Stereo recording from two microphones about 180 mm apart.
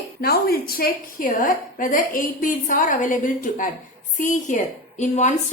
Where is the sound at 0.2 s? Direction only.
60° left (ahead or behind).